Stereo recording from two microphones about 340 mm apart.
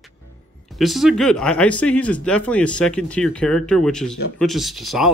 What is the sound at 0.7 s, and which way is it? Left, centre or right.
Speech, centre.